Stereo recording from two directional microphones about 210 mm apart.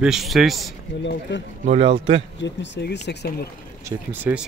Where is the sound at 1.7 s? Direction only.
30° right (ahead or behind).